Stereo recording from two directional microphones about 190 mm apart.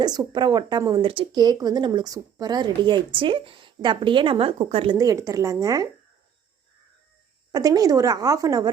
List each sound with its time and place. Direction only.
0.0 s speech: 20° right (ahead or behind)
4.9 s a woman's voice: 15° right (ahead or behind)
7.5 s speech: 20° right (ahead or behind)